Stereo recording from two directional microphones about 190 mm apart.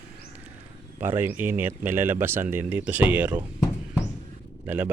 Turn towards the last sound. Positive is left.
turn(degrees=-10)  # may be behind; listen again after turning